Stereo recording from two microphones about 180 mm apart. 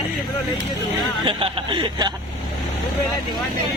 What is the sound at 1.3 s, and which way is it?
Speech, 30° right (ahead or behind).